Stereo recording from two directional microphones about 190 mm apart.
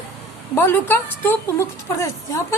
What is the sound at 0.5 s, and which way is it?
A woman's voice, 10° left (ahead or behind).